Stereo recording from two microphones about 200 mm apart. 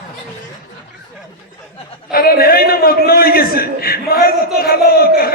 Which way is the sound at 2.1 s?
50° left (ahead or behind).